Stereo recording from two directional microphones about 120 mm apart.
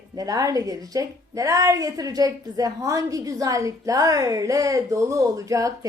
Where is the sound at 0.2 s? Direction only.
30° right (ahead or behind).